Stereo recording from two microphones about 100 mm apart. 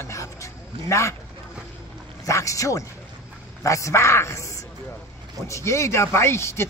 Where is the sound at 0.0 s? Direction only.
30° left (ahead or behind).